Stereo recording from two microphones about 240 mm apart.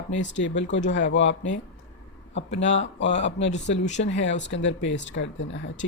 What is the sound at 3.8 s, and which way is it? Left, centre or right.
Speech, left.